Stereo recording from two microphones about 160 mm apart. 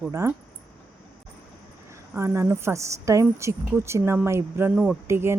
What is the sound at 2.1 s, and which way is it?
Speech, 15° right (ahead or behind).